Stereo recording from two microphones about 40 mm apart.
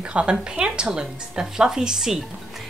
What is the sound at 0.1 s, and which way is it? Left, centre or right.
Speech, right.